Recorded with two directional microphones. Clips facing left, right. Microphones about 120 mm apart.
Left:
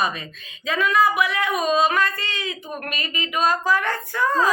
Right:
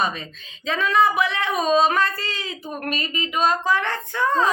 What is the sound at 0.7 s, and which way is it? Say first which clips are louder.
A woman's voice: even; 30° right (ahead or behind).